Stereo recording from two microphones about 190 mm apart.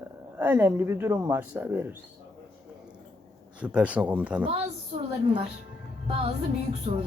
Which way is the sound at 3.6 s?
5° right (ahead or behind).